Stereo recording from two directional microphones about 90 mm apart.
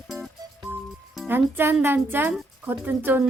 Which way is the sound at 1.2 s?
25° right (ahead or behind).